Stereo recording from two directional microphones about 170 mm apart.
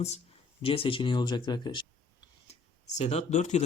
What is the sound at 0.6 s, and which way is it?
Speech, 30° left (ahead or behind).